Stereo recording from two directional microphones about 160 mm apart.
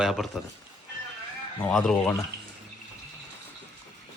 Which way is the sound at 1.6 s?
Centre (ahead or behind).